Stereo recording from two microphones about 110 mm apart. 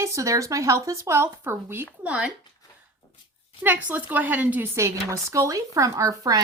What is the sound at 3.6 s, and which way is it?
A woman's voice, 15° right (ahead or behind).